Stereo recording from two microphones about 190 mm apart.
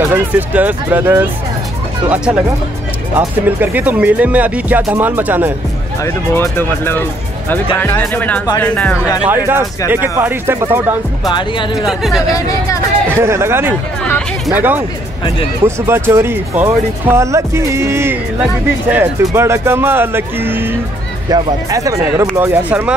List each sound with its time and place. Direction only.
0.0 s speech: 10° right (ahead or behind)
6.0 s speech: 15° left (ahead or behind)
9.8 s speech: 10° right (ahead or behind)
11.2 s speech: 25° left (ahead or behind)
11.9 s speech: centre (ahead or behind)
12.4 s speech: 15° left (ahead or behind)
13.1 s speech: 15° right (ahead or behind)